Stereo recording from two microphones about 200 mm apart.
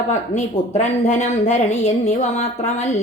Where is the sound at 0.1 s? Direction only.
35° left (ahead or behind).